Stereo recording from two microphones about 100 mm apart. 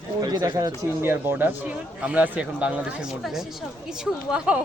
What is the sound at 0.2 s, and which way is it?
Speech, 40° right (ahead or behind).